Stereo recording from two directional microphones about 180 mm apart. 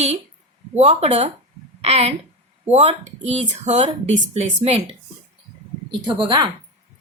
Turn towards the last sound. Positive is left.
turn(degrees=-25)  # may be behind; listen again after turning